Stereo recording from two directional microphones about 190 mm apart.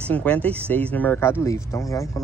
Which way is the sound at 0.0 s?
5° left (ahead or behind).